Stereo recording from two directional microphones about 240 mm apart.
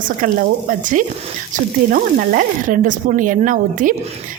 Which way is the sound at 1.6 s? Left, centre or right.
Right.